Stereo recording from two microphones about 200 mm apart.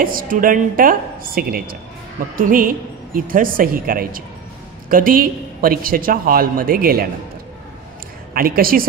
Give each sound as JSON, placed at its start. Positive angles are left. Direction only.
{"t": 0.0, "sound": "a man's voice", "side_deg": -45}
{"t": 8.3, "sound": "a woman's voice", "side_deg": -45}